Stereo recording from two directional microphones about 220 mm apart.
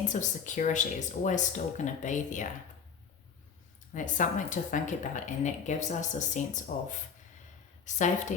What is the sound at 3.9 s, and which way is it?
Speech, 35° left (ahead or behind).